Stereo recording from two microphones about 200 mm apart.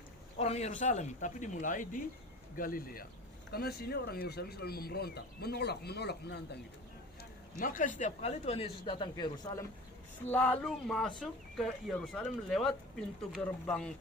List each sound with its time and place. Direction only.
0.3 s speech: 35° left (ahead or behind); by 6.6 s 55° left (ahead or behind)
7.6 s speech: 40° left (ahead or behind); by 9.6 s 20° left (ahead or behind)
10.2 s speech: 10° left (ahead or behind)